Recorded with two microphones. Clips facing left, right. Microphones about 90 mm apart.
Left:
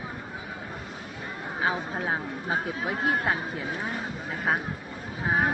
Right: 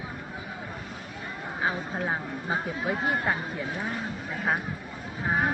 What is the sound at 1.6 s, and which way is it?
Speech, 5° left (ahead or behind).